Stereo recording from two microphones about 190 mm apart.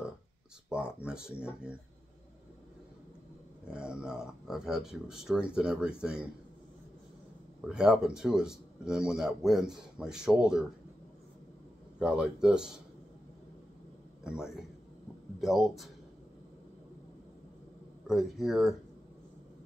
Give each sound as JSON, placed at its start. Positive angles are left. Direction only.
{"t": 0.7, "sound": "a man's voice", "side_deg": -5}
{"t": 3.7, "sound": "a man's voice", "side_deg": -5}
{"t": 7.6, "sound": "a man's voice", "side_deg": -5}
{"t": 12.0, "sound": "a man's voice", "side_deg": -5}
{"t": 14.2, "sound": "a man's voice", "side_deg": -5}
{"t": 18.0, "sound": "a man's voice", "side_deg": 0}